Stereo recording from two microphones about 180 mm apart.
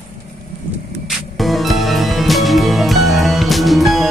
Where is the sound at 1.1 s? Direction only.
Centre (ahead or behind).